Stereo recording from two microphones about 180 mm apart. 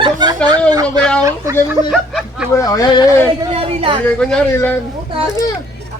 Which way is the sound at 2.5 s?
20° left (ahead or behind).